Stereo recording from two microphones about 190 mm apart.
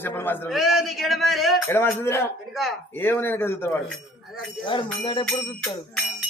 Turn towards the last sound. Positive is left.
turn(degrees=0)  # may be behind; listen again after turning